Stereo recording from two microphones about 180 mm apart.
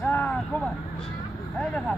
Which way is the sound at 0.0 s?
10° left (ahead or behind).